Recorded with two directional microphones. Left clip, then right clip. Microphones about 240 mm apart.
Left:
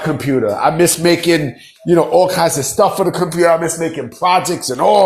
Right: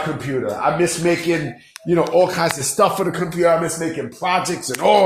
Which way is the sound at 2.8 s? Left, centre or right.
Centre.